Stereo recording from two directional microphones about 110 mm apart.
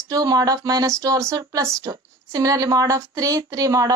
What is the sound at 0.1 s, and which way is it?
Speech, 35° right (ahead or behind).